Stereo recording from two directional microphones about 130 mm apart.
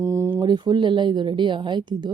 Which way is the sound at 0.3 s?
35° right (ahead or behind).